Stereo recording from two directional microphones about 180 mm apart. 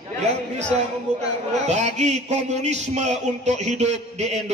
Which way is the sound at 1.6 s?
40° right (ahead or behind).